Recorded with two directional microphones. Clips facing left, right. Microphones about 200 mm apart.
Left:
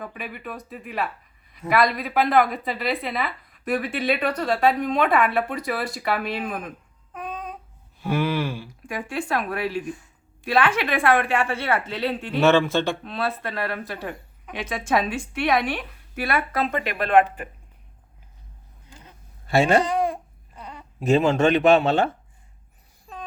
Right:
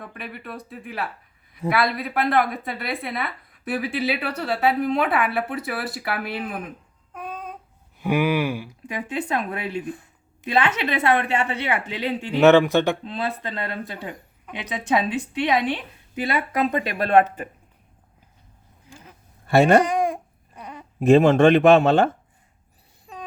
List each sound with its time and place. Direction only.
0.0 s a woman's voice: 5° left (ahead or behind)
7.1 s babbling: centre (ahead or behind)
8.0 s a woman's voice: 15° right (ahead or behind)
19.5 s speech: 55° right (ahead or behind)
19.8 s babbling: 15° right (ahead or behind)
20.6 s a sound: 20° right (ahead or behind)
21.0 s speech: 55° right (ahead or behind)